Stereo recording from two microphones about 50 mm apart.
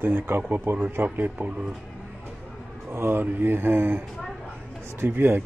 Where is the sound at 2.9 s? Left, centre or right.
Right.